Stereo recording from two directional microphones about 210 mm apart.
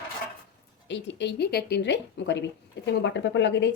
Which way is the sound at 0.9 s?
55° left (ahead or behind).